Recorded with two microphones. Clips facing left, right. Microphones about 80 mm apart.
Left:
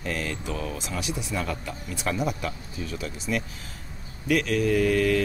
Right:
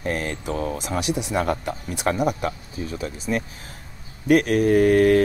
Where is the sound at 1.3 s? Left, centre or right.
Right.